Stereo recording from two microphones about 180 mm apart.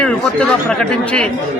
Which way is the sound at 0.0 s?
5° left (ahead or behind).